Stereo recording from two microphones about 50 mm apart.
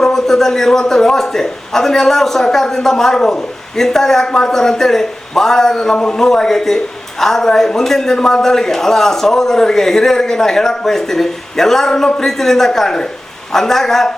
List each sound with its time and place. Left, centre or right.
0.0 s a man's voice: centre